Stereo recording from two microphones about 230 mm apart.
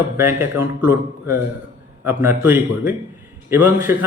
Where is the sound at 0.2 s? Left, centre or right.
Centre.